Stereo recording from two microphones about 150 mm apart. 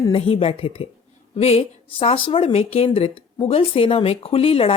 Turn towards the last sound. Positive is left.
turn(degrees=40)  # may be behind; listen again after turning